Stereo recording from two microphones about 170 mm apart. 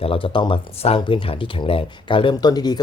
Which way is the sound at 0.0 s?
30° left (ahead or behind).